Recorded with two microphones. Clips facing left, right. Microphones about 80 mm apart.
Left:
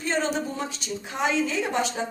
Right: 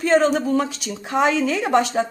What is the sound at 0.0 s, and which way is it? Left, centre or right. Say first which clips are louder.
A woman's voice: right 9 dB; right.